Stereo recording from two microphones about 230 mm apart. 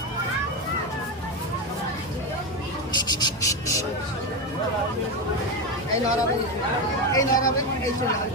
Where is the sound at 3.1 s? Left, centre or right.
Centre.